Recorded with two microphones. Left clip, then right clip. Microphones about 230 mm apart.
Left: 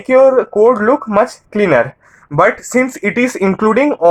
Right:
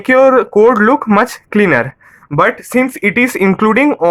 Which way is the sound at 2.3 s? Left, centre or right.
Right.